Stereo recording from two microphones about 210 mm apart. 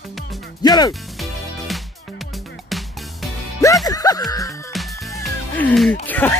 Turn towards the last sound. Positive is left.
turn(degrees=10)  # may be behind; listen again after turning